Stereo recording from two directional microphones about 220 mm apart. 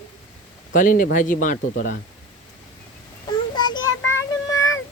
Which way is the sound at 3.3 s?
20° left (ahead or behind).